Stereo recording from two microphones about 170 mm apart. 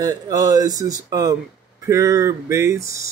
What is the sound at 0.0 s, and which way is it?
Speech, 20° right (ahead or behind).